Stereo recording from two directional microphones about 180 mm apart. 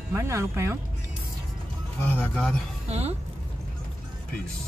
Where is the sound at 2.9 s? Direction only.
35° right (ahead or behind).